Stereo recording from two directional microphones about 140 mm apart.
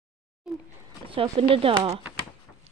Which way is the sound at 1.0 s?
40° right (ahead or behind).